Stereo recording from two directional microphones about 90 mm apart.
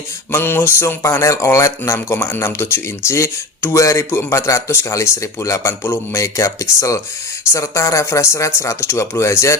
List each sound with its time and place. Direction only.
0.3 s speech: 25° left (ahead or behind)